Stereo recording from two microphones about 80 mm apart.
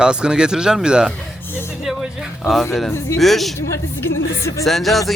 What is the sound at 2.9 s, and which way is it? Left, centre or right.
Speech, left.